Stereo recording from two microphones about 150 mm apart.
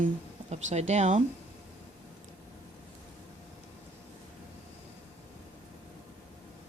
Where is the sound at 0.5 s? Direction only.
50° right (ahead or behind).